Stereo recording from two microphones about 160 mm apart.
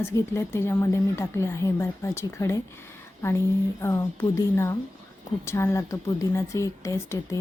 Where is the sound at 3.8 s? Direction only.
20° left (ahead or behind).